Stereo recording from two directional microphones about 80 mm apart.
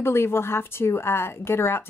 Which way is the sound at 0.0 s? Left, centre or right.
Left.